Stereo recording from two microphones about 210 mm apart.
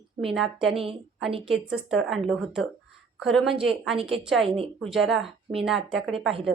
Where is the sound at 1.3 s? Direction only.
25° right (ahead or behind).